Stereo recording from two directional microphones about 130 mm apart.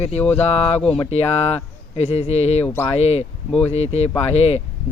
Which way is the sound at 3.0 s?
55° left (ahead or behind).